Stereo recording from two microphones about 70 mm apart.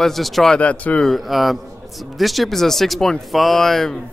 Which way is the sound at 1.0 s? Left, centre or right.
Centre.